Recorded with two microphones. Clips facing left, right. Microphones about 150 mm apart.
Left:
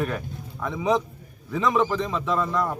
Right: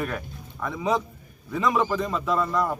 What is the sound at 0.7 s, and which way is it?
Speech, 15° left (ahead or behind).